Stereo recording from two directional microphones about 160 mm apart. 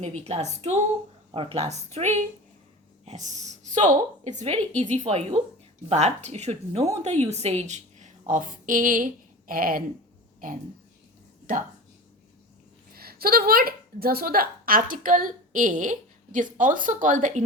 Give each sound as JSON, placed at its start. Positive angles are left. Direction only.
{"t": 0.0, "sound": "a woman's voice", "side_deg": -45}
{"t": 3.2, "sound": "a woman's voice", "side_deg": -50}
{"t": 12.9, "sound": "a woman's voice", "side_deg": -70}